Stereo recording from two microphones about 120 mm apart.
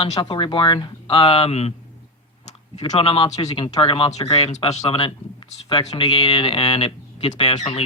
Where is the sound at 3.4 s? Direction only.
40° left (ahead or behind).